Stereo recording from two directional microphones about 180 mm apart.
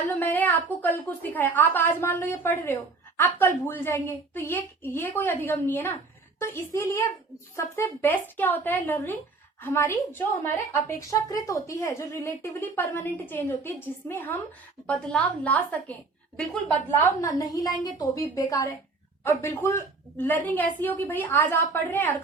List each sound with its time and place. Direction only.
0.1 s speech: 10° left (ahead or behind)
17.2 s a woman's voice: 20° left (ahead or behind)